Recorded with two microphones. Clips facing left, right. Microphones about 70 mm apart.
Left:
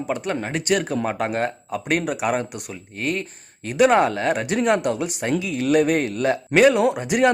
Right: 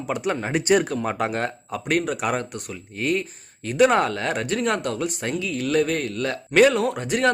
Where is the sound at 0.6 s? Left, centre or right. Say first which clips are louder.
Right 3 dB; right.